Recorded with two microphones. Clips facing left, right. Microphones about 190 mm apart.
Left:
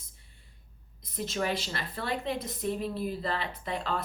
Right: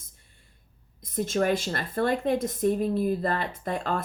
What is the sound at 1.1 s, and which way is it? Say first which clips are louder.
A woman's voice: right 7 dB; 50° right (ahead or behind).